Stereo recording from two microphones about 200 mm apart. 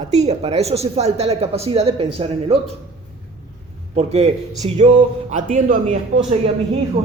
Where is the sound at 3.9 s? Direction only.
30° right (ahead or behind).